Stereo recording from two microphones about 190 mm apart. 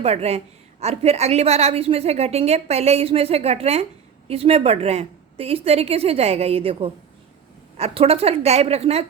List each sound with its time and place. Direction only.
0.0 s a woman's voice: 35° right (ahead or behind)